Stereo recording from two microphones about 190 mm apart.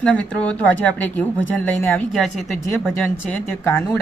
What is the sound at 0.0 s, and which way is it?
Speech, 5° left (ahead or behind).